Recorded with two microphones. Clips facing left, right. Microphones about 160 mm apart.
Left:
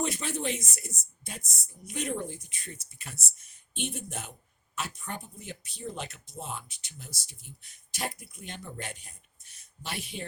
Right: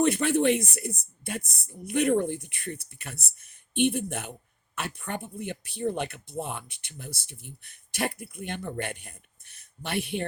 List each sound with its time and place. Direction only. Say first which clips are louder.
0.0 s speech: right 9 dB; 60° right (ahead or behind)